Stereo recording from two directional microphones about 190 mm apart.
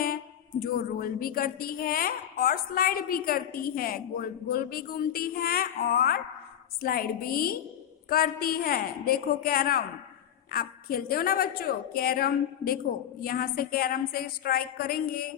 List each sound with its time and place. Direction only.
0.6 s a woman's voice: 50° left (ahead or behind)